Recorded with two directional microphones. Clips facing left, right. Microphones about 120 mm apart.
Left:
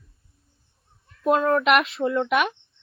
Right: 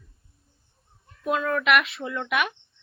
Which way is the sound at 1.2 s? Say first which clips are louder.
Left 5 dB; 35° left (ahead or behind).